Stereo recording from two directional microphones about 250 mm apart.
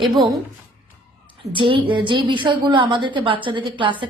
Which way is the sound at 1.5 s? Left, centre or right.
Centre.